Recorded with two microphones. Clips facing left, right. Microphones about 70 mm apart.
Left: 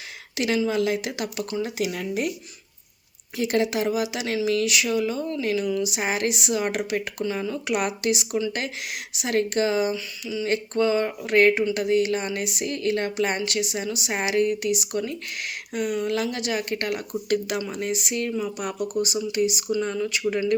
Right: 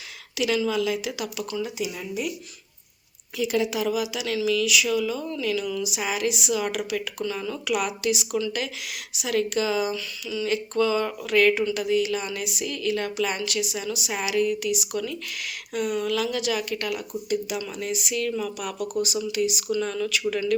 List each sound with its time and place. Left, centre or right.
0.3 s a woman's voice: left
1.6 s speech: left
3.3 s a woman's voice: left
7.6 s a woman's voice: left
9.9 s speech: left
10.4 s a woman's voice: left
16.1 s a woman's voice: left
17.2 s speech: left
17.6 s a woman's voice: left